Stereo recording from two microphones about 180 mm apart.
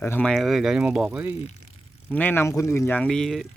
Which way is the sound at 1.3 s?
35° left (ahead or behind).